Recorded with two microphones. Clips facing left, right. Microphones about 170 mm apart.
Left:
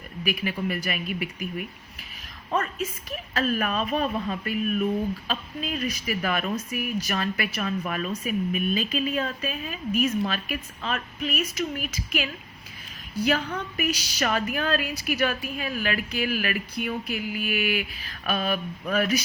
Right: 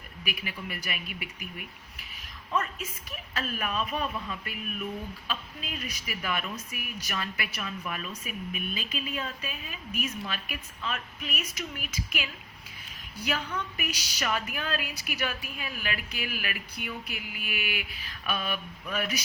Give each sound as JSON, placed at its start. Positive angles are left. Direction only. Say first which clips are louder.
{"t": 0.3, "sound": "a woman's voice", "louder": "left 10 dB", "side_deg": 45}
{"t": 3.4, "sound": "a woman's voice", "louder": "left 7 dB", "side_deg": 40}